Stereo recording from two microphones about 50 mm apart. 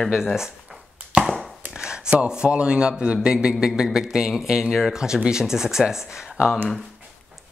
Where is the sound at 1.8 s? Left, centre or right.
Centre.